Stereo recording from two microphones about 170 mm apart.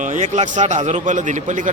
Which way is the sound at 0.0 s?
45° right (ahead or behind).